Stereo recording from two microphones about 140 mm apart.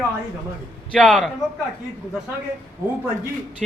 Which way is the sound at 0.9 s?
5° left (ahead or behind).